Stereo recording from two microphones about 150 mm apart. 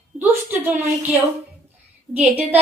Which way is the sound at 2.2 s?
10° right (ahead or behind).